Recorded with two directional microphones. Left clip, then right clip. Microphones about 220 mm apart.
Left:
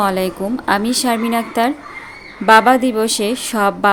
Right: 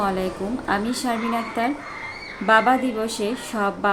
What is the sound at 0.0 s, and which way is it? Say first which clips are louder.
Speech: left 7 dB; 50° left (ahead or behind).